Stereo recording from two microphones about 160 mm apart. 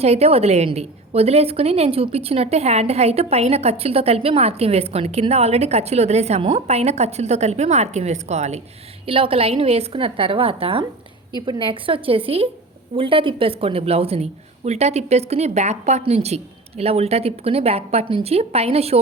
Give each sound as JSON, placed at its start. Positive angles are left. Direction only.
{"t": 0.0, "sound": "a woman's voice", "side_deg": -40}